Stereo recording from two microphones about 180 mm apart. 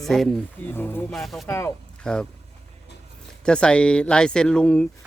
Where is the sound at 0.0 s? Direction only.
Centre (ahead or behind).